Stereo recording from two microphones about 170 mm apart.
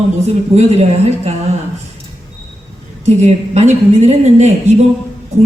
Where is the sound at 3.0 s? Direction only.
40° right (ahead or behind).